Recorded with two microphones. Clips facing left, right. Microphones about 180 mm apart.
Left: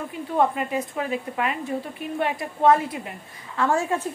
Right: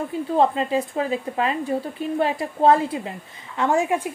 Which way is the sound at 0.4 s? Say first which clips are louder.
Right 2 dB; 25° right (ahead or behind).